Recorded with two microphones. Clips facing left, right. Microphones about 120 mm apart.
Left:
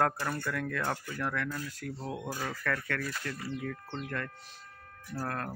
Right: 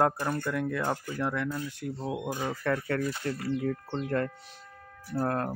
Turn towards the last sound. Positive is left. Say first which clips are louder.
# right 7 dB
turn(degrees=-25)  # may be behind; listen again after turning